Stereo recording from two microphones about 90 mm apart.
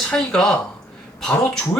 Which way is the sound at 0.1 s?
10° left (ahead or behind).